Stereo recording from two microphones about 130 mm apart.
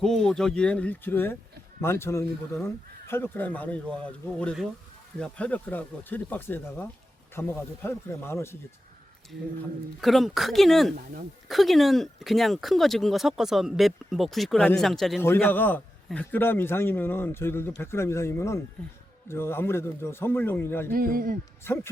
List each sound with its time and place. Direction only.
0.0 s speech: 5° left (ahead or behind); by 8.5 s 20° left (ahead or behind)
10.0 s speech: centre (ahead or behind)
15.2 s speech: 15° left (ahead or behind)
20.9 s speech: 90° right
21.7 s speech: 20° left (ahead or behind)